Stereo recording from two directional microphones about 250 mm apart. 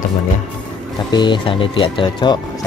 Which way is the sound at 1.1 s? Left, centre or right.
Centre.